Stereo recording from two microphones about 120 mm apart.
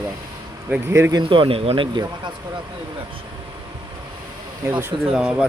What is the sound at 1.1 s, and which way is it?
Speech, 45° right (ahead or behind).